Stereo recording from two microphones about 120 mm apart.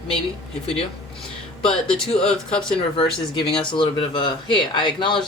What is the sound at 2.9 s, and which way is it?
Speech, 40° left (ahead or behind).